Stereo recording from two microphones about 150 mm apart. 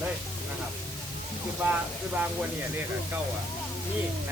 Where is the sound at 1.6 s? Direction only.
10° right (ahead or behind).